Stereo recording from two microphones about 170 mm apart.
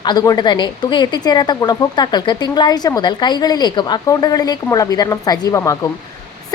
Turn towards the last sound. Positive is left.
turn(degrees=20)  # may be behind; listen again after turning